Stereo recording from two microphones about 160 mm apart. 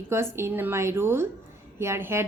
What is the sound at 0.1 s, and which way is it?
A woman's voice, 15° right (ahead or behind).